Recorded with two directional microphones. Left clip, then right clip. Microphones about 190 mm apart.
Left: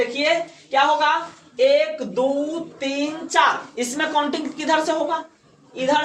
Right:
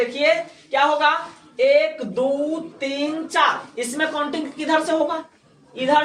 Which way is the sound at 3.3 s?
30° left (ahead or behind).